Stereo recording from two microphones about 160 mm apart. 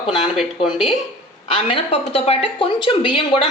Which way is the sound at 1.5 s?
35° left (ahead or behind).